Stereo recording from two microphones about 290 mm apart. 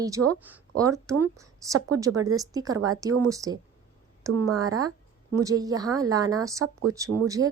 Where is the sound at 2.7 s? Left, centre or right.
Right.